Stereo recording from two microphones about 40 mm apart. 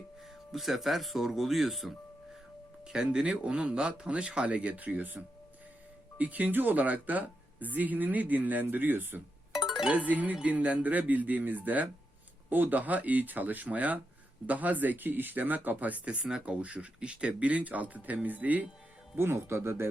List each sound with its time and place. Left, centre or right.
0.5 s speech: centre
2.8 s speech: right
9.5 s music: centre
9.9 s speech: right
16.2 s speech: right
19.1 s speech: right